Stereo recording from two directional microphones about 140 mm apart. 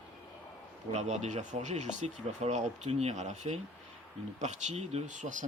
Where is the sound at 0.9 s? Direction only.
55° right (ahead or behind).